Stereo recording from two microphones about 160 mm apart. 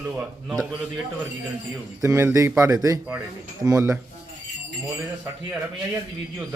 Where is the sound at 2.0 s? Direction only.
15° right (ahead or behind).